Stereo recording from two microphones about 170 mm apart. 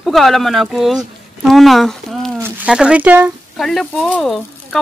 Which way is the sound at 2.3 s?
10° right (ahead or behind).